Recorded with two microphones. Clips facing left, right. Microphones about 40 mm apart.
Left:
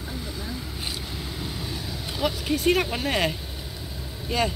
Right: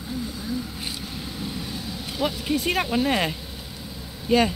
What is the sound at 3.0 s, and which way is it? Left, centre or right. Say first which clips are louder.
Speech: right 1 dB; centre.